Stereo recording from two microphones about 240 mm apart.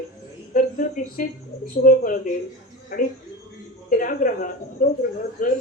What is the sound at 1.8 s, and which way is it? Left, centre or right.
Speech, left.